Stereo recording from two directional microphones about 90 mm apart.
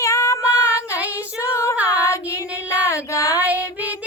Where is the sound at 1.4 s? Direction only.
30° left (ahead or behind).